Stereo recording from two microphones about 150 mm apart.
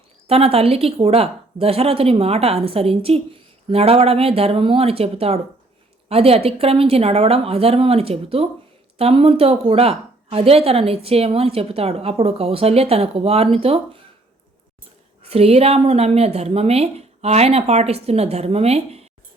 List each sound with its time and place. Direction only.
0.3 s a woman's voice: 40° right (ahead or behind)
15.2 s speech: 40° right (ahead or behind)